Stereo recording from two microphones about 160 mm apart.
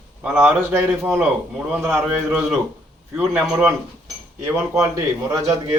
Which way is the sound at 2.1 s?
Centre (ahead or behind).